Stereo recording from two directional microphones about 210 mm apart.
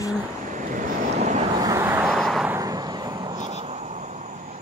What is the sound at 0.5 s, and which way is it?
Vehicle, 40° right (ahead or behind).